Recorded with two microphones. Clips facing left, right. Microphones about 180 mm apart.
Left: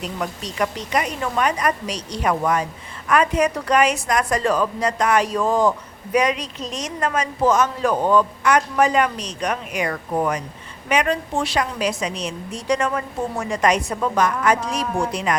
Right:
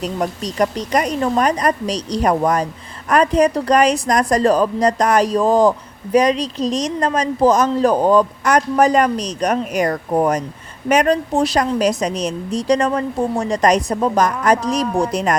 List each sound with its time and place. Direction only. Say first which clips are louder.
0.0 s a woman's voice: right 6 dB; 40° right (ahead or behind)